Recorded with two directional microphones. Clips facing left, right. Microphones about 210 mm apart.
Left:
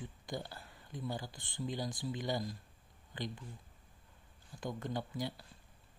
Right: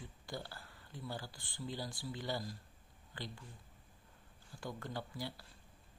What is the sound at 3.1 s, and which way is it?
Speech, 20° left (ahead or behind).